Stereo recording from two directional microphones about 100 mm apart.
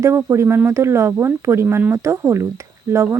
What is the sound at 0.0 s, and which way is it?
Speech, 25° right (ahead or behind).